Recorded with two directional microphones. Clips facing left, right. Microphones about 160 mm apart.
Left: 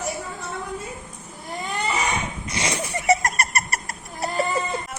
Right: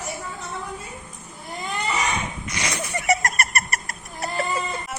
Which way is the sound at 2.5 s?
30° left (ahead or behind).